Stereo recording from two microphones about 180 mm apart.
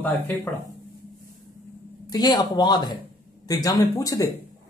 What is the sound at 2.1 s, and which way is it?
Speech, 20° left (ahead or behind).